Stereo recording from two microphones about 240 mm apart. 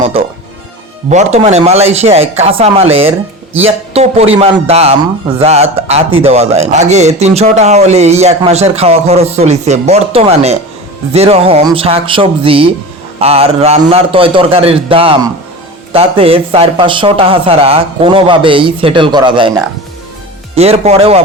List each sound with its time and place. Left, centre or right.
1.1 s speech: right
20.6 s speech: right